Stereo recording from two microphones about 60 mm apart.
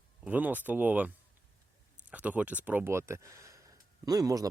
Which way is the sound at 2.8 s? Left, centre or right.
Right.